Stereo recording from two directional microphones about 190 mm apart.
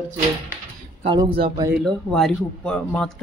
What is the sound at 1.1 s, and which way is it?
Speech, 30° right (ahead or behind).